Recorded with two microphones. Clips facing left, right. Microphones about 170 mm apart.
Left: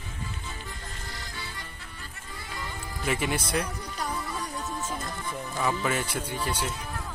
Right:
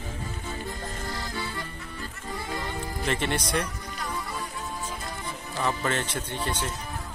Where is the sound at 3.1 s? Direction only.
10° left (ahead or behind).